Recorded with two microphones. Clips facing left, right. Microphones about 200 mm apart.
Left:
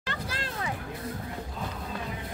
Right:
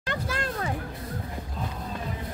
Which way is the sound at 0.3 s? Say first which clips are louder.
Right 5 dB; 50° right (ahead or behind).